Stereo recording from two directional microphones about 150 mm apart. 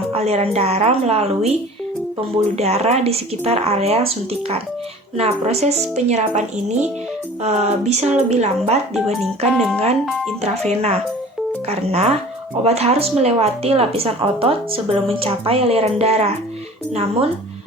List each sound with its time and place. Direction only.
0.1 s speech: 45° right (ahead or behind)
10.4 s a woman's voice: 45° right (ahead or behind)